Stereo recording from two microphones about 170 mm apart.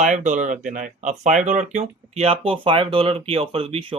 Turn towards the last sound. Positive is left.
turn(degrees=-35)  # may be behind; listen again after turning